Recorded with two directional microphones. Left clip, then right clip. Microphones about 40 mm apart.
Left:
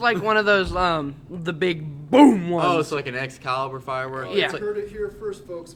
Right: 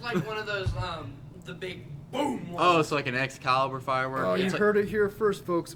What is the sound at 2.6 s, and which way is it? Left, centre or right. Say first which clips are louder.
Speech: left 2 dB; centre.